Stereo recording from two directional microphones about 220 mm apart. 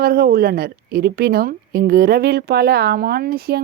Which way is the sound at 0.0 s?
45° right (ahead or behind).